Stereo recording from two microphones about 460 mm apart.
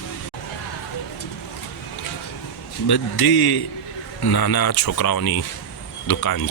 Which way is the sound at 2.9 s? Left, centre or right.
Left.